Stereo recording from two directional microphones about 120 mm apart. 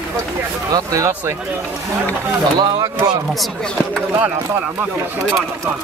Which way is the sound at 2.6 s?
35° right (ahead or behind).